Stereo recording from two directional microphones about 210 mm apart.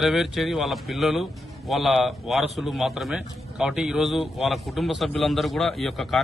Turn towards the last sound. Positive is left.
turn(degrees=0)  # may be behind; listen again after turning